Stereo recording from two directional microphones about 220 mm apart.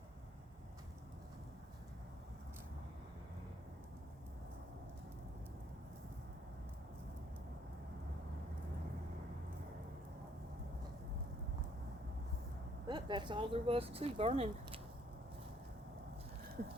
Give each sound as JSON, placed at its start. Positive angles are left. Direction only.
{"t": 12.9, "sound": "speech", "side_deg": -20}